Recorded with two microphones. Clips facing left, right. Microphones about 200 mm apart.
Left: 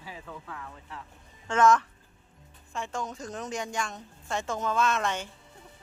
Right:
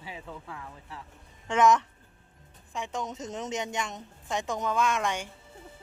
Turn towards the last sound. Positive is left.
turn(degrees=-15)  # may be behind; listen again after turning